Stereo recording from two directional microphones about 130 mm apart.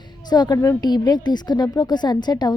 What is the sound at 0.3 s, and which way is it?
Speech, 30° left (ahead or behind).